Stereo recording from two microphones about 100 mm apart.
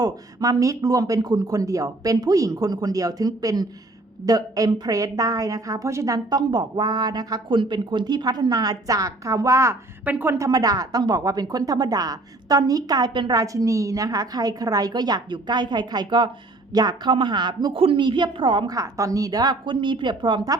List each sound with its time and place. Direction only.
0.0 s a woman's voice: 40° right (ahead or behind)
10.0 s a woman's voice: 20° right (ahead or behind)
10.3 s a woman's voice: 35° right (ahead or behind)
13.4 s a woman's voice: 35° right (ahead or behind)
17.7 s speech: 60° right (ahead or behind)
18.7 s a woman's voice: 35° right (ahead or behind)